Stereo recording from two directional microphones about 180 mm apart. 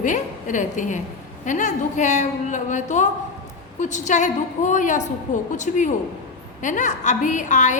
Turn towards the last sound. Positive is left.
turn(degrees=45)  # may be behind; listen again after turning